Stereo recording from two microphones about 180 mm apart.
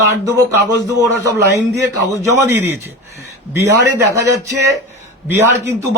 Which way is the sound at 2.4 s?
10° right (ahead or behind).